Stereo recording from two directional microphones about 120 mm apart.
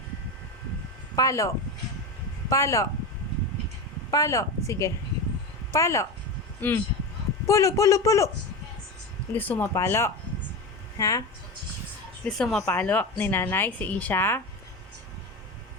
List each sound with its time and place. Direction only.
1.1 s a man's voice: 25° left (ahead or behind)
4.1 s a man's voice: 25° left (ahead or behind)
9.3 s a woman's voice: 15° left (ahead or behind)
12.4 s a woman's voice: 5° left (ahead or behind)